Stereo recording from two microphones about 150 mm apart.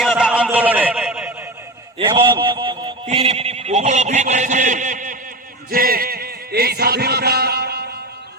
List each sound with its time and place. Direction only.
0.0 s a sound: 5° right (ahead or behind)
2.0 s speech: 30° right (ahead or behind); by 5.1 s 60° right (ahead or behind)
5.7 s a man's voice: 75° right (ahead or behind); by 7.9 s 90° right